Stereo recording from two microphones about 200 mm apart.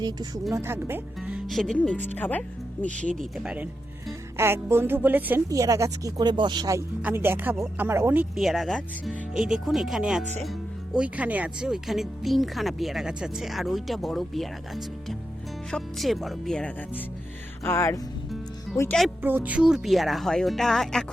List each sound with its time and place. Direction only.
0.0 s a woman's voice: 20° right (ahead or behind); by 2.0 s 5° left (ahead or behind)
2.1 s music: 10° left (ahead or behind)
3.2 s a woman's voice: centre (ahead or behind)
17.6 s music: 15° left (ahead or behind)
18.8 s speech: 5° left (ahead or behind)